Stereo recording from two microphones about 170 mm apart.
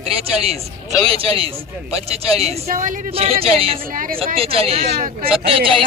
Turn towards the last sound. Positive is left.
turn(degrees=-30)  # may be behind; listen again after turning